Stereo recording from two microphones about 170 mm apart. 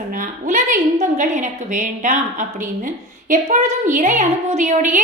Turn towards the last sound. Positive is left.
turn(degrees=-45)  # may be behind; listen again after turning